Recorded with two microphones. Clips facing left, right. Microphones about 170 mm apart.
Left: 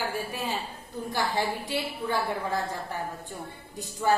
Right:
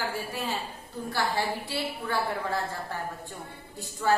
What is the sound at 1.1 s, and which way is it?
Speech, 15° left (ahead or behind).